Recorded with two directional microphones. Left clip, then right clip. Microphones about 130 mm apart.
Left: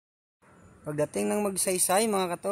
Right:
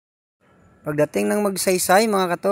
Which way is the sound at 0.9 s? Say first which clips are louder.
Right 9 dB; 50° right (ahead or behind).